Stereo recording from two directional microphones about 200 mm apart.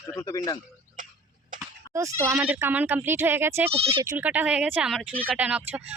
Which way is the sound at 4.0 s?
10° right (ahead or behind).